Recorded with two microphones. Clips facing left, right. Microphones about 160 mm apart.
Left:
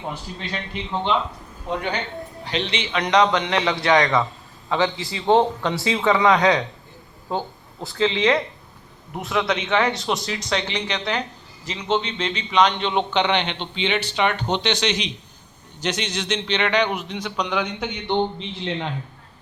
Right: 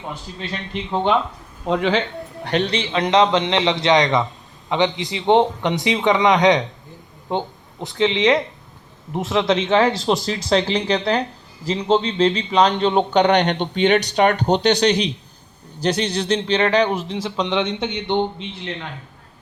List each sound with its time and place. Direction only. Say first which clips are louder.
1.6 s speech: right 7 dB; 90° right
2.6 s a man's voice: right 4 dB; 30° right (ahead or behind)